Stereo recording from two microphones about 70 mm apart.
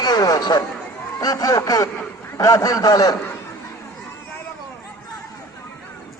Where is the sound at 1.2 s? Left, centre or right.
Left.